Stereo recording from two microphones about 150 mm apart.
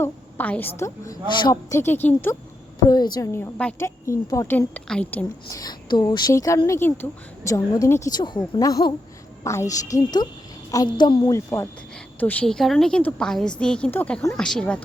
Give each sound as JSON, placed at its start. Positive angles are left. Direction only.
{"t": 0.0, "sound": "a woman's voice", "side_deg": 10}
{"t": 2.8, "sound": "a woman's voice", "side_deg": 25}
{"t": 5.5, "sound": "speech", "side_deg": 25}
{"t": 11.3, "sound": "a woman's voice", "side_deg": 20}